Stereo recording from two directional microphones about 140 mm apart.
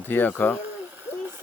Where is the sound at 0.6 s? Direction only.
15° right (ahead or behind).